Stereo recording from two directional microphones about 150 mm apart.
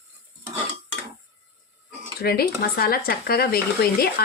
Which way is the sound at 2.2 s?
90° left.